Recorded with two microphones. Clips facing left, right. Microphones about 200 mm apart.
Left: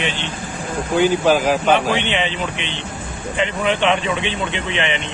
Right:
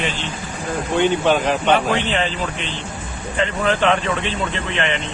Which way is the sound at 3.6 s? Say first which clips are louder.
Right 1 dB; centre (ahead or behind).